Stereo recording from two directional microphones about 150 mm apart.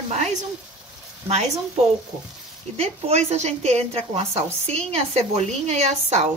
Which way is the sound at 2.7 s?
45° right (ahead or behind).